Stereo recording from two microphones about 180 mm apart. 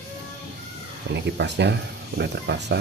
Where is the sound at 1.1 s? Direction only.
70° right (ahead or behind).